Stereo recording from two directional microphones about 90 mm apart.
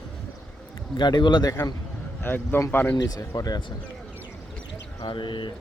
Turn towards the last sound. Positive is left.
turn(degrees=60)  # may be behind; listen again after turning